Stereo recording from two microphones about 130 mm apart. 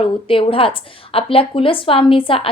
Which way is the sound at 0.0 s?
45° left (ahead or behind).